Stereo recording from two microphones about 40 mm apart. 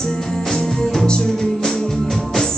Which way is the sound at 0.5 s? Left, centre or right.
Centre.